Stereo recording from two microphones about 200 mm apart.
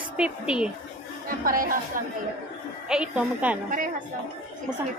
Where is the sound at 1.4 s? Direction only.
45° right (ahead or behind).